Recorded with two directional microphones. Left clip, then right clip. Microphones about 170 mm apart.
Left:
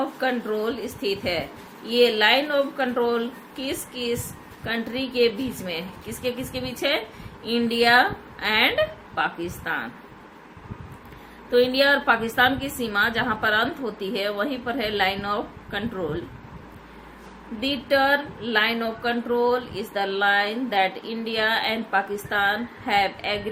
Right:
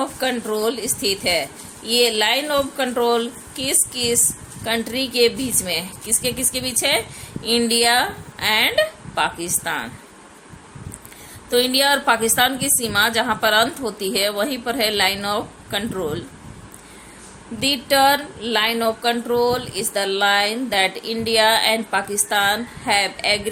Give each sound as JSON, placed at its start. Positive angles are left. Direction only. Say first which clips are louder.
{"t": 0.2, "sound": "a woman's voice", "louder": "right 3 dB", "side_deg": -50}
{"t": 11.5, "sound": "speech", "louder": "right 2 dB", "side_deg": -70}
{"t": 17.6, "sound": "speech", "louder": "right 5 dB", "side_deg": -55}